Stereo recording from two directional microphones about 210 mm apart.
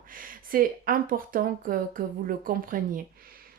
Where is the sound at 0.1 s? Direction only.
40° right (ahead or behind).